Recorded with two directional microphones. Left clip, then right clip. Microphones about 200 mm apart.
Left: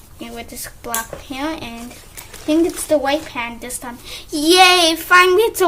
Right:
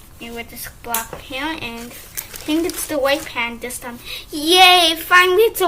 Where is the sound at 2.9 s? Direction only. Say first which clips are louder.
Even; 45° left (ahead or behind).